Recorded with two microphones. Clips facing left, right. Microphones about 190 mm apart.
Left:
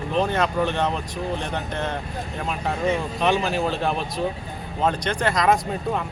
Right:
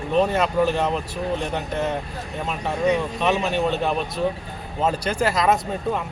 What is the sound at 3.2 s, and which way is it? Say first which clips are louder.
Speech: left 1 dB; centre (ahead or behind).